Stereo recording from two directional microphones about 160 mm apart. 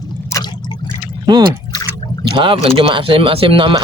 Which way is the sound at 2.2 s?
30° right (ahead or behind).